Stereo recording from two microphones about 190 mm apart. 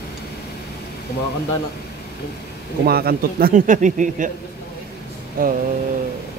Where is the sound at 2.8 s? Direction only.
55° right (ahead or behind).